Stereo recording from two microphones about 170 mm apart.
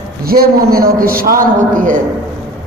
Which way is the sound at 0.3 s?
60° right (ahead or behind).